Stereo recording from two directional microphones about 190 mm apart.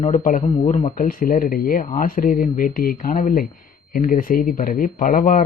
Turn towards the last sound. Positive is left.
turn(degrees=45)  # may be behind; listen again after turning